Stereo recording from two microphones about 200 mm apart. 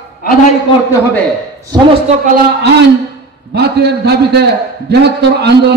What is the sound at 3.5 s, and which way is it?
A man's voice, 55° right (ahead or behind).